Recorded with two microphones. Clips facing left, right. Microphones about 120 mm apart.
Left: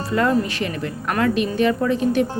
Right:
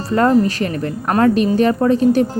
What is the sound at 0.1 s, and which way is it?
A woman's voice, 40° right (ahead or behind).